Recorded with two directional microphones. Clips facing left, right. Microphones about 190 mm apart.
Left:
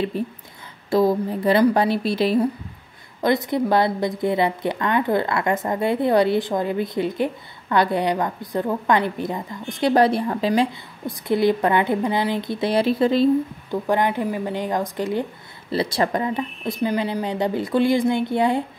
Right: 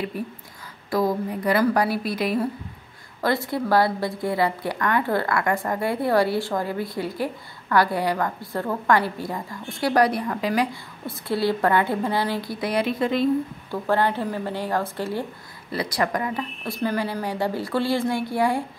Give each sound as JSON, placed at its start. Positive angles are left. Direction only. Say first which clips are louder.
{"t": 0.2, "sound": "a woman's voice", "louder": "left 4 dB", "side_deg": 25}
{"t": 13.7, "sound": "a woman's voice", "louder": "left 1 dB", "side_deg": 15}